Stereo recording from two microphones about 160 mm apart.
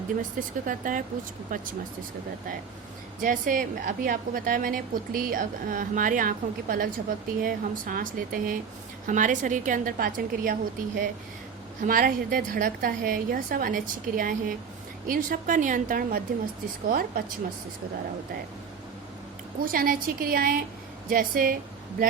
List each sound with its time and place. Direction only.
0.2 s a woman's voice: 55° right (ahead or behind)
3.2 s a woman's voice: 60° right (ahead or behind)
19.5 s a woman's voice: 65° right (ahead or behind)